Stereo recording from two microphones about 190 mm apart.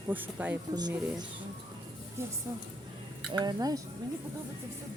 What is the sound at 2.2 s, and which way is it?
Speech, 15° right (ahead or behind).